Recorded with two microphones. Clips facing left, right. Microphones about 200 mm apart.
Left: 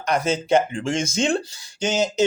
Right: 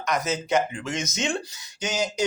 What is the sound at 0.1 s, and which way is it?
Speech, 30° left (ahead or behind).